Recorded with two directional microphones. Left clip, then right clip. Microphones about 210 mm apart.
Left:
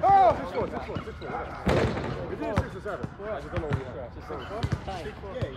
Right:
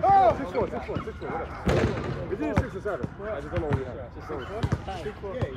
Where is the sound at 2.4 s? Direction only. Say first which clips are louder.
Right 2 dB; 5° left (ahead or behind).